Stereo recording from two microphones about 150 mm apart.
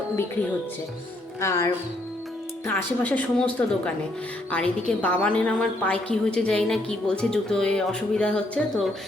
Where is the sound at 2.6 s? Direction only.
10° left (ahead or behind).